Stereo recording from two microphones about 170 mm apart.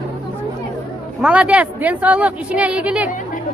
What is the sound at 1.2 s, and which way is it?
Speech, 5° right (ahead or behind).